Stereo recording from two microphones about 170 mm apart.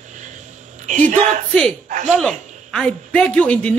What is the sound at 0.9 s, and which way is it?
Speech, 45° right (ahead or behind).